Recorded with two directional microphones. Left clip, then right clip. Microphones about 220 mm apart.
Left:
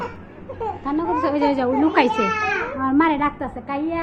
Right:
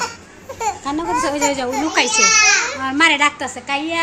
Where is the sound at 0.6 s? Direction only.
25° right (ahead or behind).